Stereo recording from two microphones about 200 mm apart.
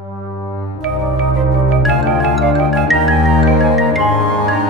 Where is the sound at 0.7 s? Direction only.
90° left.